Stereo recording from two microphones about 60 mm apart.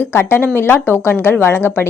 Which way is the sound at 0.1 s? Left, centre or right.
Left.